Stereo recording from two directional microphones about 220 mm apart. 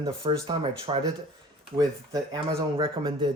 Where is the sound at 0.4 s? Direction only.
25° right (ahead or behind).